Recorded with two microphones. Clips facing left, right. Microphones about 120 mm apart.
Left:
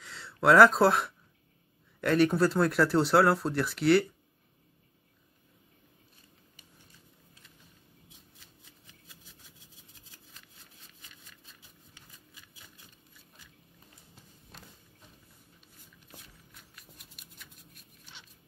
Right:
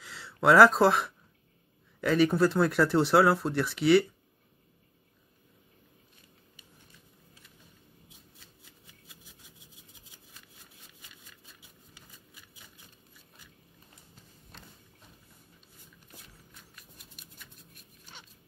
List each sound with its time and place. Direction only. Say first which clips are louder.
0.0 s speech: right 1 dB; centre (ahead or behind)